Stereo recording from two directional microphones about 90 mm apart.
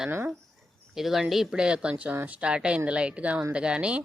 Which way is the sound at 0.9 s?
5° right (ahead or behind).